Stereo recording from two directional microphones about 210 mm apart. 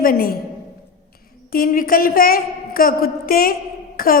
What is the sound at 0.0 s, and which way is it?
Speech, 45° left (ahead or behind).